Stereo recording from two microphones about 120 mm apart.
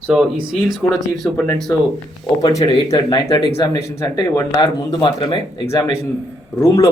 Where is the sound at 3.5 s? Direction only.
25° left (ahead or behind).